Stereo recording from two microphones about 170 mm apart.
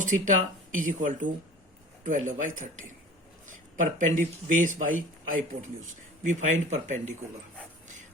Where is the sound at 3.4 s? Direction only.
50° right (ahead or behind).